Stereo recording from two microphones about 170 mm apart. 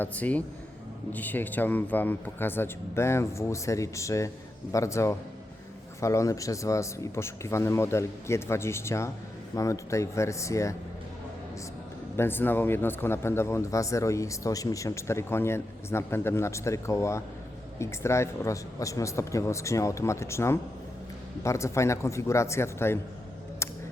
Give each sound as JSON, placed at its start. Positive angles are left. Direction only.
{"t": 0.0, "sound": "a man's voice", "side_deg": 10}
{"t": 12.1, "sound": "a man's voice", "side_deg": 15}
{"t": 23.6, "sound": "a sound", "side_deg": 15}